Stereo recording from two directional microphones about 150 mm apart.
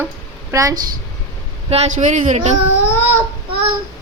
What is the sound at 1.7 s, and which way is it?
Speech, 50° right (ahead or behind).